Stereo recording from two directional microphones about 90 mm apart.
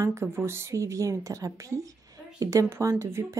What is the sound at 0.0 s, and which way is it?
Speech, 30° right (ahead or behind).